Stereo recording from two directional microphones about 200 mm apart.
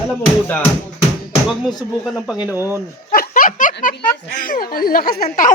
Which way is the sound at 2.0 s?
5° right (ahead or behind).